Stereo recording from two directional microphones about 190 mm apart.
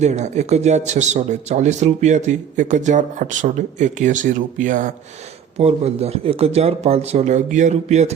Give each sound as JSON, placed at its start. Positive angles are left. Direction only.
{"t": 0.0, "sound": "speech", "side_deg": -40}
{"t": 5.5, "sound": "speech", "side_deg": -35}